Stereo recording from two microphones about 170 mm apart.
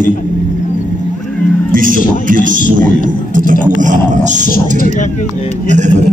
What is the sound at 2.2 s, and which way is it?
Speech, 50° right (ahead or behind).